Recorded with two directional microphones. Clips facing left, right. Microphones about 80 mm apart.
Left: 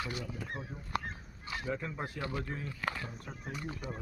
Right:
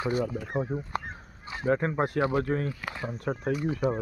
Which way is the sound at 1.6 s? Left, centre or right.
Right.